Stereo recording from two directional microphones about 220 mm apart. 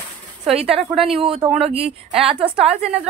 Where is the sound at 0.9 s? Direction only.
Centre (ahead or behind).